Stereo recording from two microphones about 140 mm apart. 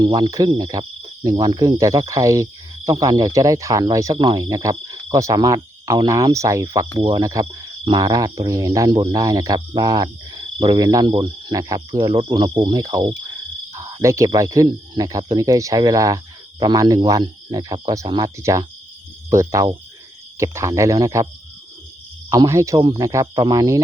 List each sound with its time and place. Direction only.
0.0 s speech: 30° right (ahead or behind)
13.7 s cricket: 20° right (ahead or behind)
14.3 s speech: 25° right (ahead or behind)
22.3 s speech: 25° right (ahead or behind)